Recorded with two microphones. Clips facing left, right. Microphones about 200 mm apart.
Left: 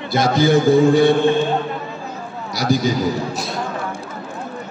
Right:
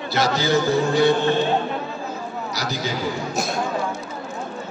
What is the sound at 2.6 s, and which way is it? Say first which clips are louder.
Speech: left 10 dB; 50° left (ahead or behind).